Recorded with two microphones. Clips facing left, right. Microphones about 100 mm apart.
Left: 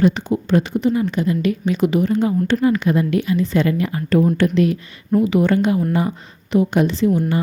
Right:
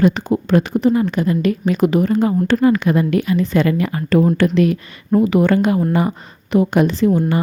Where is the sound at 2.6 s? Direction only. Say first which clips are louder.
Right 3 dB; 60° right (ahead or behind).